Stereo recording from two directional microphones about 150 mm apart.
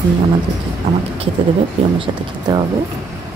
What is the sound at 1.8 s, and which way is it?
Speech, 40° right (ahead or behind).